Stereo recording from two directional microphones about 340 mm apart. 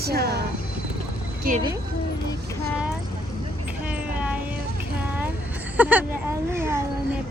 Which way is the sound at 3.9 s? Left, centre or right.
Centre.